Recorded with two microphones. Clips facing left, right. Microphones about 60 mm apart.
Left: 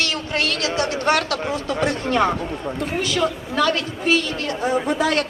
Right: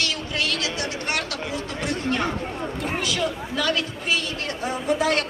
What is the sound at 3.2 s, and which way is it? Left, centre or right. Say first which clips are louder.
Speech: left 7 dB; left.